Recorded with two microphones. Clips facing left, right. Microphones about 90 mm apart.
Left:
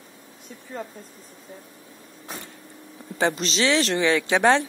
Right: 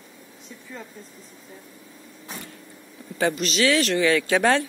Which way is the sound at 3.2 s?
30° left (ahead or behind).